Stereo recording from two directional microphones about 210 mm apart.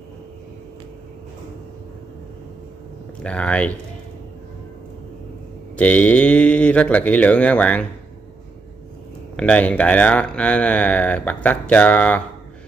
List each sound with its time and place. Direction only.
3.2 s speech: 5° left (ahead or behind)
5.8 s speech: 5° left (ahead or behind)
9.4 s speech: 5° left (ahead or behind)